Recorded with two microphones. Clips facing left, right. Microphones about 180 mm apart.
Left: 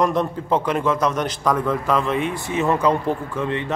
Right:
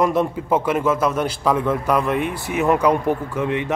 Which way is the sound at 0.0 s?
10° right (ahead or behind).